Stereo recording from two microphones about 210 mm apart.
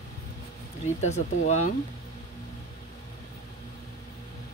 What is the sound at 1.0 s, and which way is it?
Speech, 35° left (ahead or behind).